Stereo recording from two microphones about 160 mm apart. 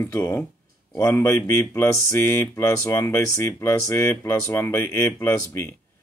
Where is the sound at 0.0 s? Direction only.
15° left (ahead or behind).